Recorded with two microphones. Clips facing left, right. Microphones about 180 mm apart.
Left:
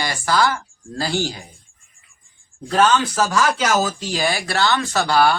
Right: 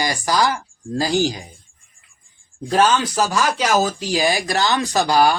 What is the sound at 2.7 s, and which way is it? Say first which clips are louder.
Speech: even; 15° right (ahead or behind).